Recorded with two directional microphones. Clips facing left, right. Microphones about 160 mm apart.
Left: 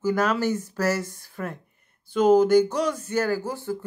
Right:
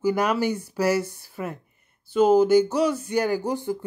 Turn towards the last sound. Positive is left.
turn(degrees=-15)  # may be behind; listen again after turning